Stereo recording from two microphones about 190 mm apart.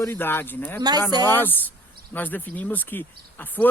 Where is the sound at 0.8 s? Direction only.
20° right (ahead or behind).